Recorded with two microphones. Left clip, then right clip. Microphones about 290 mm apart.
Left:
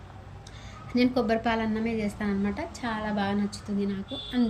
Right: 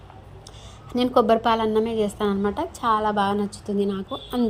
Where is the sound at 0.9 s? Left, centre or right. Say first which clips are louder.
Right 7 dB; centre.